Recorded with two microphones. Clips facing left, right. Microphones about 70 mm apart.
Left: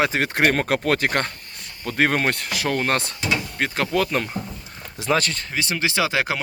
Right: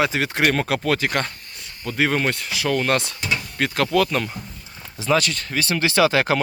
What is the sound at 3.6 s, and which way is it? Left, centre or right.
Speech, left.